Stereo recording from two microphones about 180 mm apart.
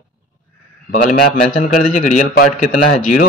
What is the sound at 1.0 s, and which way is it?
A man's voice, 45° left (ahead or behind).